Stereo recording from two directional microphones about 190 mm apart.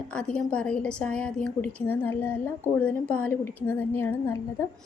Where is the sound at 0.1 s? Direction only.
5° left (ahead or behind).